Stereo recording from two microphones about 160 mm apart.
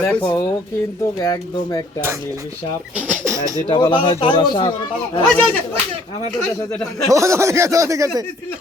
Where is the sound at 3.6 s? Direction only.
30° left (ahead or behind).